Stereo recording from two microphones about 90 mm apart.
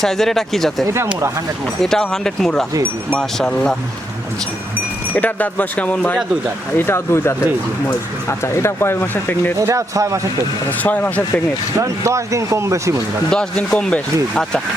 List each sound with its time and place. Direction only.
0.0 s speech: 5° left (ahead or behind)
5.1 s speech: 20° left (ahead or behind)
6.7 s speech: 25° left (ahead or behind)
9.6 s speech: 35° right (ahead or behind)
10.7 s speech: 20° left (ahead or behind)
11.8 s speech: 35° right (ahead or behind)
13.3 s speech: 10° left (ahead or behind)